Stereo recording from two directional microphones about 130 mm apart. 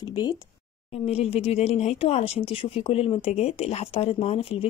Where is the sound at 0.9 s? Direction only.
50° left (ahead or behind).